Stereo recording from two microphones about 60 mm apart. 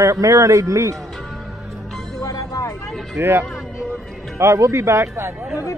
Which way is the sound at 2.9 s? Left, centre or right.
Centre.